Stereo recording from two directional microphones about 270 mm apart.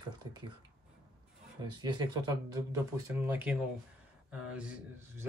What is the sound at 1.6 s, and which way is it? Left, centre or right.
Speech, centre.